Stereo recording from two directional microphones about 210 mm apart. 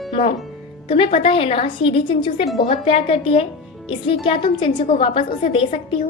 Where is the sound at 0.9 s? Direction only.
30° left (ahead or behind).